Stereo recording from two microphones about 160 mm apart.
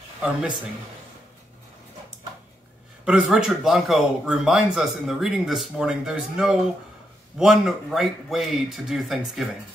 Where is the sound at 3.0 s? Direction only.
5° right (ahead or behind).